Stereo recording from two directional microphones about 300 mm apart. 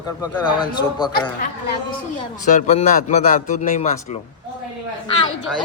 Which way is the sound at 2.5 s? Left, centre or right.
Left.